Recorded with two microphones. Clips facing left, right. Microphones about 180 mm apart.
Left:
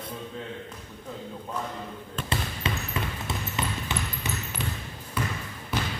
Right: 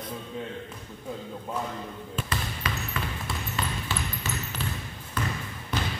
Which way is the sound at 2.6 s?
25° left (ahead or behind).